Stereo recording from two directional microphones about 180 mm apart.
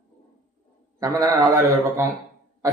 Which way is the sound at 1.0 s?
20° right (ahead or behind).